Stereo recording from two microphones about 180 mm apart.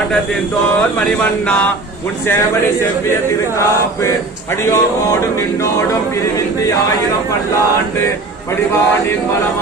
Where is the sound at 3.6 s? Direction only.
15° left (ahead or behind).